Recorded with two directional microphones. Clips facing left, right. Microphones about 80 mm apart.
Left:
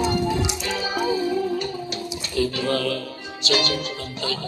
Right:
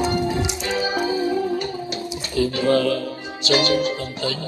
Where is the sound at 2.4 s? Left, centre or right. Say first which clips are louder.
Right 4 dB; right.